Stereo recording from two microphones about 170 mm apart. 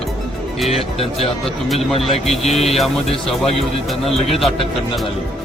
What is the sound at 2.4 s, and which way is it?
Speech, 35° left (ahead or behind).